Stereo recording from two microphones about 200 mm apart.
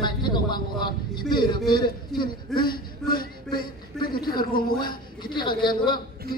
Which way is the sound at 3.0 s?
5° left (ahead or behind).